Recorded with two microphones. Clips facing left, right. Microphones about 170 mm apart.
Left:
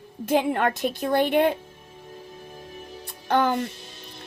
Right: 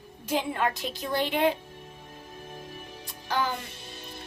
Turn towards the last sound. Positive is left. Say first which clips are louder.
# left 7 dB
turn(degrees=55)  # may be behind; listen again after turning